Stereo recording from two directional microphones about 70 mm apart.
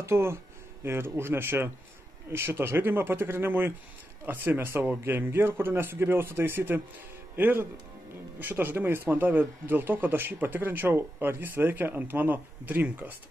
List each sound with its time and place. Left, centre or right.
0.0 s a man's voice: right